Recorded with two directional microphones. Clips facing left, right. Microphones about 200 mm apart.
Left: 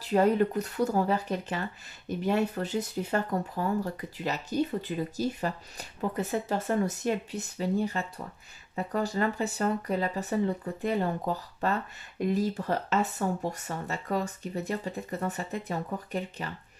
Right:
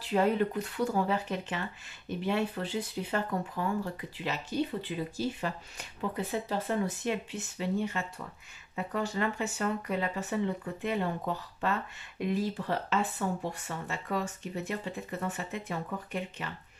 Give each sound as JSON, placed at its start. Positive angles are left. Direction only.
{"t": 0.0, "sound": "speech", "side_deg": 40}